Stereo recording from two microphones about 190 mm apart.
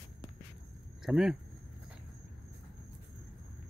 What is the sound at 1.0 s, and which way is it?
Speech, centre (ahead or behind).